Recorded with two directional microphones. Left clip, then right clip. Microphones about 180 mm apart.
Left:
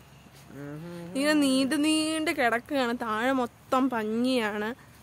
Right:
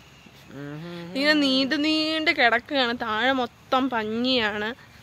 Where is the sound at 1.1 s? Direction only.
15° left (ahead or behind).